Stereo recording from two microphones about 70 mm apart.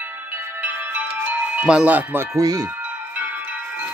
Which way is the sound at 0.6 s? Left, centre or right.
Right.